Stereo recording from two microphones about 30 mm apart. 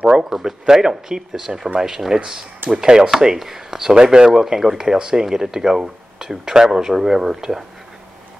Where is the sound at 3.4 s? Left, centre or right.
Centre.